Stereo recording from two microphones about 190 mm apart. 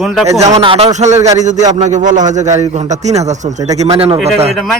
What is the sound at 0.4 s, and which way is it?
A man's voice, 30° right (ahead or behind).